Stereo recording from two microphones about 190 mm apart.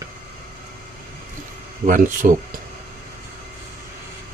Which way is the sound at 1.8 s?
45° right (ahead or behind).